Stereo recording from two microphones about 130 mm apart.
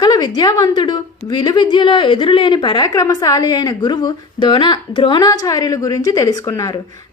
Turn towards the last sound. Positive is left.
turn(degrees=25)  # may be behind; listen again after turning